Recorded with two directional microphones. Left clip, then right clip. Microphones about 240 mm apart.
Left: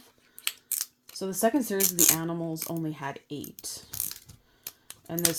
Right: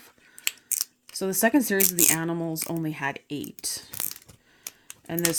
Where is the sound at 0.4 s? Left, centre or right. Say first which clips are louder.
Right 4 dB; centre.